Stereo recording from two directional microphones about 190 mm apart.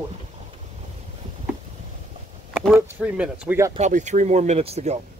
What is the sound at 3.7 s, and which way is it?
Speech, 40° right (ahead or behind).